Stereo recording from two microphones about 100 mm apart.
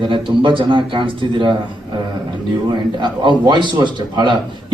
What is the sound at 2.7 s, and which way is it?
Speech, 50° right (ahead or behind).